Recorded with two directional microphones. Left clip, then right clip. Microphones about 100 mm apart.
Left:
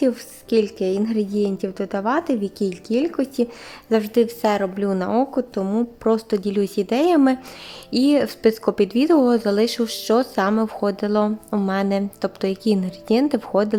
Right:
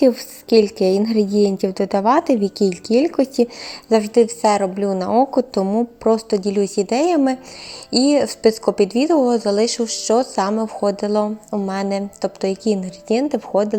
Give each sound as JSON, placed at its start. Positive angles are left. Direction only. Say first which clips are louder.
{"t": 0.0, "sound": "a woman's voice", "louder": "right 6 dB", "side_deg": -25}
{"t": 3.8, "sound": "a woman's voice", "louder": "right 4 dB", "side_deg": -5}
{"t": 5.2, "sound": "a woman's voice", "louder": "right 5 dB", "side_deg": -20}
{"t": 5.6, "sound": "a woman's voice", "louder": "right 3 dB", "side_deg": 0}
{"t": 11.2, "sound": "a woman's voice", "louder": "right 1 dB", "side_deg": 35}
{"t": 11.7, "sound": "a woman's voice", "louder": "left 1 dB", "side_deg": 5}